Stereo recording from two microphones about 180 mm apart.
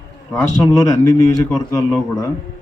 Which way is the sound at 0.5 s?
20° left (ahead or behind).